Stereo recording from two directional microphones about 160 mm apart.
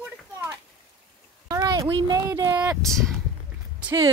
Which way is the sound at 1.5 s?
25° right (ahead or behind).